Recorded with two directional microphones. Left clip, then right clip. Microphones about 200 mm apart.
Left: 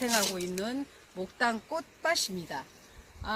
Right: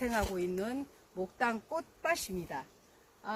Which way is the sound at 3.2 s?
10° right (ahead or behind).